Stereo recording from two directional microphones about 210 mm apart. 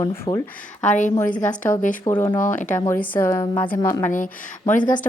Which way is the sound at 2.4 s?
35° left (ahead or behind).